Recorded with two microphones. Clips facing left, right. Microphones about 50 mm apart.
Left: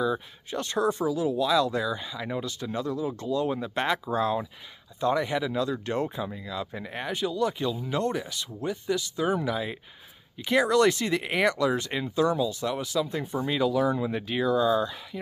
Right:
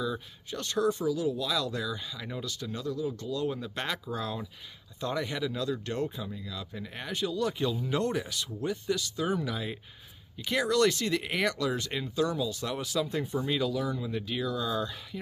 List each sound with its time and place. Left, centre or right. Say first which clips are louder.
0.0 s speech: left 6 dB; centre
5.0 s speech: left 6 dB; centre
13.5 s speech: left 7 dB; centre
13.8 s speech: left 6 dB; left; by 15.0 s centre